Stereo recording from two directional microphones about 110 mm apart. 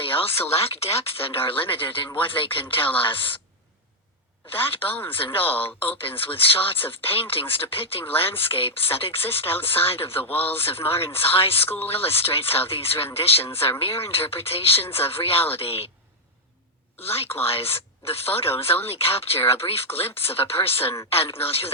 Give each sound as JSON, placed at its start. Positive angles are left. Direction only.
{"t": 0.0, "sound": "a sound", "side_deg": 55}
{"t": 0.5, "sound": "speech", "side_deg": 65}
{"t": 4.7, "sound": "speech", "side_deg": 55}
{"t": 11.6, "sound": "speech", "side_deg": 20}
{"t": 12.0, "sound": "speech", "side_deg": 60}
{"t": 17.0, "sound": "speech", "side_deg": 65}